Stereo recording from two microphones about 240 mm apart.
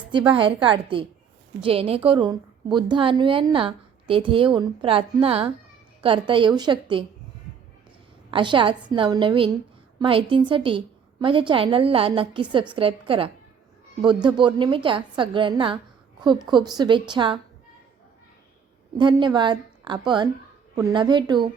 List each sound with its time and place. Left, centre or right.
0.1 s a woman's voice: centre
8.3 s a woman's voice: centre
18.9 s a woman's voice: centre